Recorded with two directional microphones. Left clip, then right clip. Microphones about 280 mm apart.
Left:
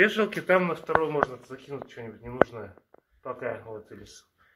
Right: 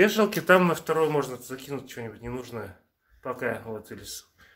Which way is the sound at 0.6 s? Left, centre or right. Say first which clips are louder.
Right 2 dB; right.